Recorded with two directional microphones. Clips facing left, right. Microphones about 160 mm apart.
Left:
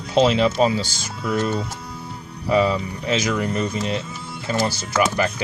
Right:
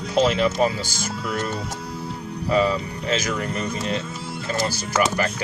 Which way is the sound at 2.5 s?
20° left (ahead or behind).